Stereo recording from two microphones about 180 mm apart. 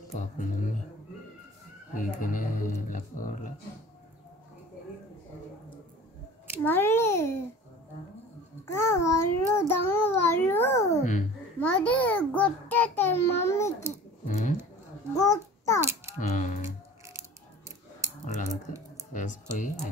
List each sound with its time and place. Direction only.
0.1 s speech: 45° left (ahead or behind)
2.2 s speech: 45° left (ahead or behind)
6.6 s child singing: 10° left (ahead or behind)
8.6 s child singing: 15° left (ahead or behind)
10.9 s a child's voice: 40° left (ahead or behind)
11.6 s child singing: 10° left (ahead or behind)
14.2 s speech: 45° left (ahead or behind)
15.1 s a child's voice: 20° left (ahead or behind)
16.2 s music: 45° left (ahead or behind)
17.2 s scissors: 15° right (ahead or behind)
18.2 s a sound: 45° left (ahead or behind)
19.1 s speech: 45° left (ahead or behind)